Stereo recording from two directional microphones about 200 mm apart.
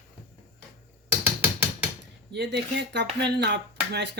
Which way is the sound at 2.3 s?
60° right (ahead or behind).